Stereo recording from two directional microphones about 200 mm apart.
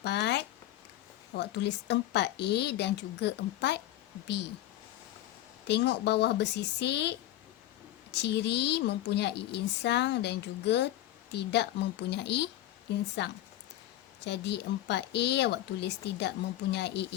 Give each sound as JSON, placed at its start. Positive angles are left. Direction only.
{"t": 0.0, "sound": "a sound", "side_deg": 55}
{"t": 1.4, "sound": "a woman's voice", "side_deg": 60}
{"t": 5.6, "sound": "a woman's voice", "side_deg": 60}